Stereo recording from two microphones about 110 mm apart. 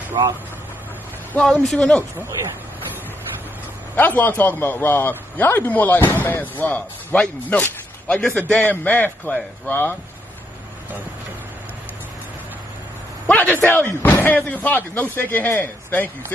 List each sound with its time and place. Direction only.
1.4 s a man's voice: 5° left (ahead or behind)
3.9 s a man's voice: 15° left (ahead or behind)
7.4 s a sound: 15° left (ahead or behind)
8.4 s a man's voice: 10° left (ahead or behind)
13.3 s a man's voice: 15° left (ahead or behind)